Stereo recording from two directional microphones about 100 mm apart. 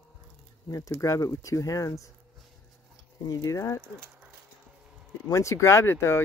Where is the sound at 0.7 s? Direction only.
35° left (ahead or behind).